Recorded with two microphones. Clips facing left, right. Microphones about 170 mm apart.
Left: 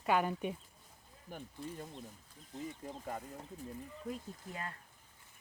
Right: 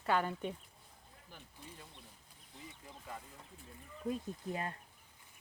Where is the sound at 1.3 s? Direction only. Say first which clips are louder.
Left 10 dB; 50° left (ahead or behind).